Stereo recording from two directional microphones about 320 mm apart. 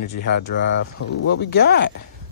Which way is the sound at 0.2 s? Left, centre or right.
Left.